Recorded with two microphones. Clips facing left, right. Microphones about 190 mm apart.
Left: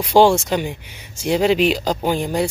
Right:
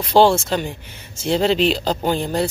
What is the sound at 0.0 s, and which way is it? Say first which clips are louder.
Speech: left 1 dB; 10° left (ahead or behind).